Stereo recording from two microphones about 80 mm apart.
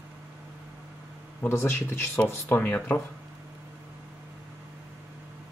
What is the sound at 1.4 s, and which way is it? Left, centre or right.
Speech, left.